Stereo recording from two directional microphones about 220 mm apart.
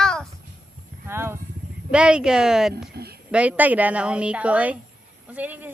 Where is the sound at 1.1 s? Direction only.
10° right (ahead or behind).